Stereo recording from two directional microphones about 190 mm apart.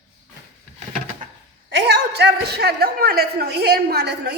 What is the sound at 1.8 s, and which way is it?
A man's voice, 60° right (ahead or behind).